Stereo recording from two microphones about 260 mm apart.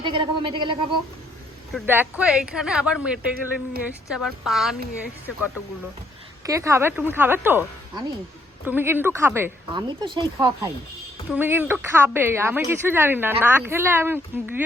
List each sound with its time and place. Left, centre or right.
0.0 s speech: centre
1.7 s speech: centre
4.1 s speech: centre
6.4 s speech: centre